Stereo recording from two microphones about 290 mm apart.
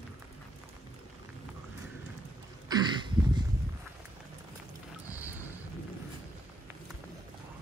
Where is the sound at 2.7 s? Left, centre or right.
Centre.